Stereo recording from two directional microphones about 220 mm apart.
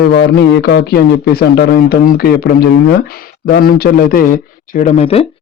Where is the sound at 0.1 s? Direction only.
45° left (ahead or behind).